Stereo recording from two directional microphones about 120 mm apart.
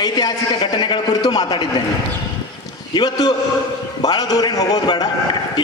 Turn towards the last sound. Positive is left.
turn(degrees=35)  # may be behind; listen again after turning